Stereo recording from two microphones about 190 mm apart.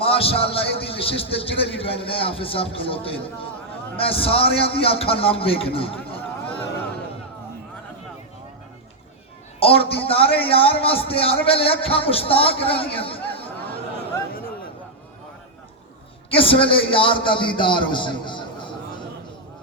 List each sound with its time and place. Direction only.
0.0 s speech: 30° left (ahead or behind)
9.6 s speech: 30° left (ahead or behind)
16.3 s a man's voice: 30° left (ahead or behind)